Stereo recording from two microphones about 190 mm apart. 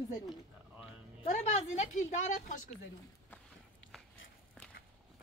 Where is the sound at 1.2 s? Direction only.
35° left (ahead or behind).